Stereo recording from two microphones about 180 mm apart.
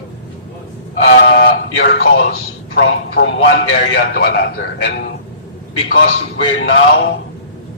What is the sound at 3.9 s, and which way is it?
Speech, 60° left (ahead or behind).